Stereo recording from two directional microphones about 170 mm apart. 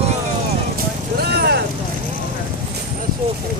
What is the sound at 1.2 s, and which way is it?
Vehicle, 70° right (ahead or behind).